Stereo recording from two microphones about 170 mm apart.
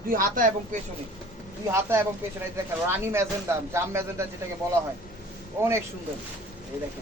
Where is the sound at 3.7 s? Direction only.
15° right (ahead or behind).